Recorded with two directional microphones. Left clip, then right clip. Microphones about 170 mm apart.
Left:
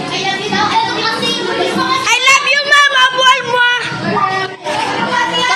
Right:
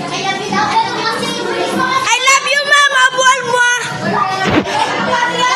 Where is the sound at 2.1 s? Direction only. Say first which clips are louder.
Left 3 dB; 5° right (ahead or behind).